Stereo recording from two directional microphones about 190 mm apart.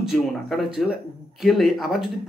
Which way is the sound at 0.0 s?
Centre (ahead or behind).